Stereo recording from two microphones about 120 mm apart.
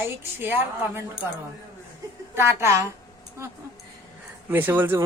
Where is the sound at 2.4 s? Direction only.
25° right (ahead or behind).